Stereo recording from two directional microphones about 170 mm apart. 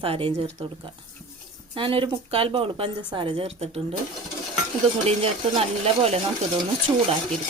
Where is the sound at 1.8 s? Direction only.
30° right (ahead or behind).